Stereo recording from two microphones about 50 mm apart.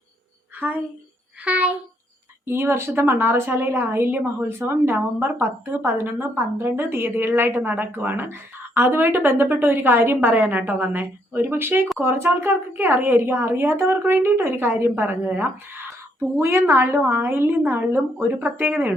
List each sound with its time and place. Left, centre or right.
1.5 s speech: right
2.5 s a woman's voice: right
16.4 s a woman's voice: right